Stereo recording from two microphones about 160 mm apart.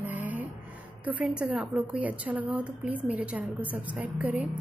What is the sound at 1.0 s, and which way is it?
A woman's voice, 10° right (ahead or behind).